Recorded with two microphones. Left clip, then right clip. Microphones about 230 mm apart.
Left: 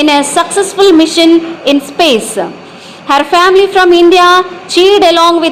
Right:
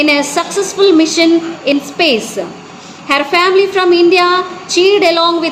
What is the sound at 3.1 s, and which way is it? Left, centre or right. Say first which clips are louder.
A woman's voice: left 4 dB; centre.